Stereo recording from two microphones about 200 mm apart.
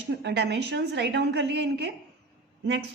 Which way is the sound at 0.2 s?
60° right (ahead or behind).